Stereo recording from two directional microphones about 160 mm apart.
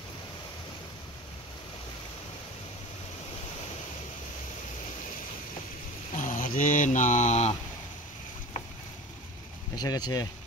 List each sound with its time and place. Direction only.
6.1 s mantra: 55° left (ahead or behind)
9.8 s speech: 25° left (ahead or behind)